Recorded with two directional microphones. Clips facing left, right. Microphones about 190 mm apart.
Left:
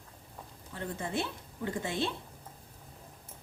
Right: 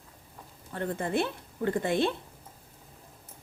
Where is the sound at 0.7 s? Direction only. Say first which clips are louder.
Right 6 dB; 55° right (ahead or behind).